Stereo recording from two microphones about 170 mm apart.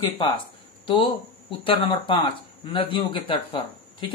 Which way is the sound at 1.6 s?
30° left (ahead or behind).